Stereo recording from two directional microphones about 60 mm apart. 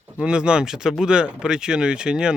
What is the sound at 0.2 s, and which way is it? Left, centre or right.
Speech, centre.